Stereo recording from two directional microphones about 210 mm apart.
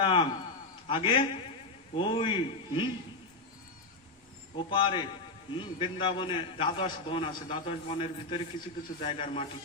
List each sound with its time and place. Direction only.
0.0 s a sound: 25° left (ahead or behind)
0.9 s a man's voice: 25° left (ahead or behind)
4.5 s a man's voice: 25° left (ahead or behind)